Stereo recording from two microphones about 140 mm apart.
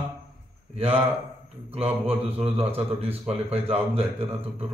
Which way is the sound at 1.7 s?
45° right (ahead or behind).